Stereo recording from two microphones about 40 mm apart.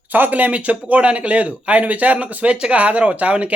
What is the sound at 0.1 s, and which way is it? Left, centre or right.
A man's voice, right.